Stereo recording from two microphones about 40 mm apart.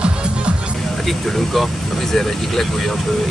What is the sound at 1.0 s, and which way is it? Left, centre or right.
Vehicle, centre.